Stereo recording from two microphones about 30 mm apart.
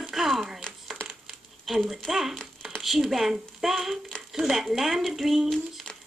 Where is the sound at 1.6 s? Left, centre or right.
Centre.